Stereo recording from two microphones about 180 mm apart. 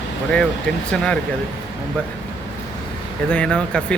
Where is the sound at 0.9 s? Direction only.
5° left (ahead or behind).